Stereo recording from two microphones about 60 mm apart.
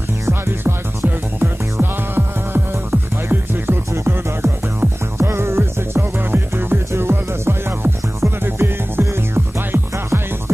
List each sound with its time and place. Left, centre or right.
0.3 s music: right